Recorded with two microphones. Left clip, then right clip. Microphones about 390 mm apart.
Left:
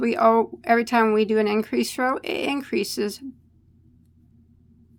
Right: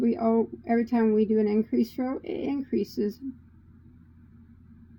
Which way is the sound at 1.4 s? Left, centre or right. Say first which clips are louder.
Left 3 dB; left.